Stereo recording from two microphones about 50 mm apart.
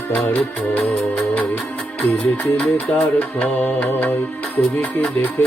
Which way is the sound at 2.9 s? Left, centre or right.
Left.